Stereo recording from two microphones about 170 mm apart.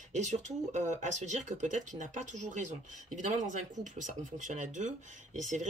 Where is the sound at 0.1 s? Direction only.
45° right (ahead or behind).